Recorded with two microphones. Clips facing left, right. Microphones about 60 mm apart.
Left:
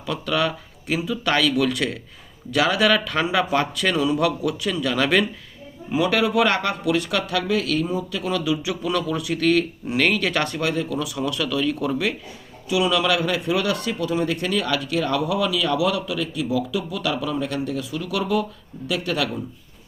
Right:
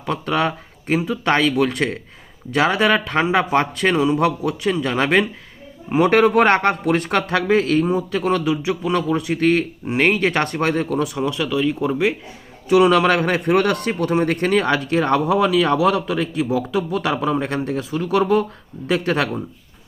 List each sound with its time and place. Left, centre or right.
0.0 s a man's voice: right
5.9 s a man's voice: right
11.2 s speech: right
12.6 s a man's voice: right